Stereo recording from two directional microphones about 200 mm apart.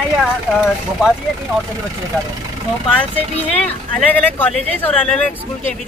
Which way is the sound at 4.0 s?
10° left (ahead or behind).